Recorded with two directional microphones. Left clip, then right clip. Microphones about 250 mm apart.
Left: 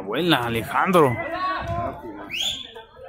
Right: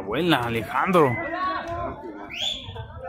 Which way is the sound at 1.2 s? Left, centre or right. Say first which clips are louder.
Left 1 dB; left.